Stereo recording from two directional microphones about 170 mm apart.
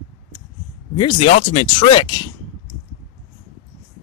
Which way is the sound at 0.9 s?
35° left (ahead or behind).